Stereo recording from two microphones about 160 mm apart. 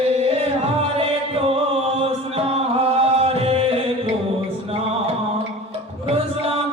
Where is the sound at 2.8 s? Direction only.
40° right (ahead or behind).